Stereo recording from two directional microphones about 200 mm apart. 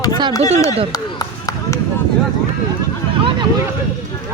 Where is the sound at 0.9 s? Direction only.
15° left (ahead or behind).